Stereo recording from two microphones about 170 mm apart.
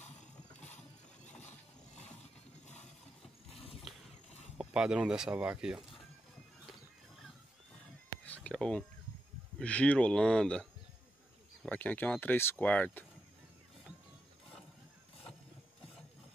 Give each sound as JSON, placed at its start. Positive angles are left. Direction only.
{"t": 3.5, "sound": "mechanisms", "side_deg": 35}
{"t": 4.6, "sound": "speech", "side_deg": -5}
{"t": 8.3, "sound": "a sound", "side_deg": 5}
{"t": 9.6, "sound": "speech", "side_deg": 5}